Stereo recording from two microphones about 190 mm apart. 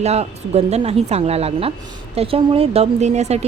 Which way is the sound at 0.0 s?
35° right (ahead or behind).